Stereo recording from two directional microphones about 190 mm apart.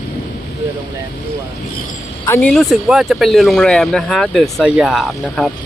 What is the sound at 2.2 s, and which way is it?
Speech, 15° left (ahead or behind).